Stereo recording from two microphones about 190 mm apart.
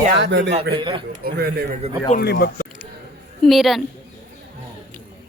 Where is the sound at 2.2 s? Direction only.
55° left (ahead or behind).